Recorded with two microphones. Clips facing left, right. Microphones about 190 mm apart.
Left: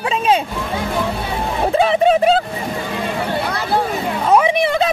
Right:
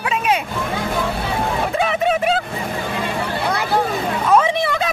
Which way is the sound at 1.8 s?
30° left (ahead or behind).